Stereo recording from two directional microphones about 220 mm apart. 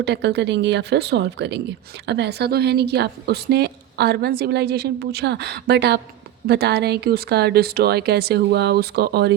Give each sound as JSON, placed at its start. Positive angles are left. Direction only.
{"t": 0.0, "sound": "a woman's voice", "side_deg": -50}